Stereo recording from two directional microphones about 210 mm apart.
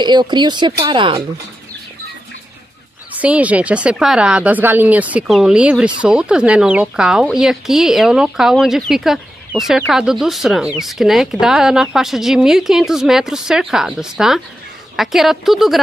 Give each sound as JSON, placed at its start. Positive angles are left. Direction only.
{"t": 0.0, "sound": "speech", "side_deg": -20}
{"t": 3.2, "sound": "speech", "side_deg": -5}